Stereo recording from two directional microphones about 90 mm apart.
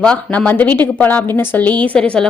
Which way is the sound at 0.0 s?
15° left (ahead or behind).